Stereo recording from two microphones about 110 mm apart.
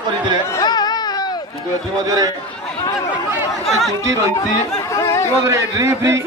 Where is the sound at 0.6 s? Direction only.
40° left (ahead or behind).